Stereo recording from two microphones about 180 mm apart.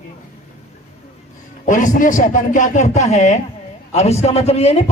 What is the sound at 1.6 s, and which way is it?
A man's voice, 45° left (ahead or behind).